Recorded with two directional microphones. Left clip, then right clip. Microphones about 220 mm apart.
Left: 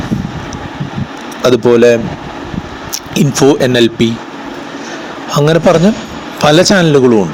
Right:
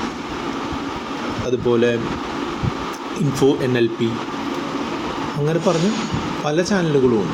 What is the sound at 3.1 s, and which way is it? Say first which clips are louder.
Speech: left 9 dB; 40° left (ahead or behind).